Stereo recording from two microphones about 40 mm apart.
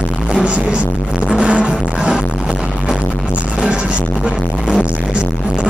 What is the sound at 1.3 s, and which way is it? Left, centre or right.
Music, right.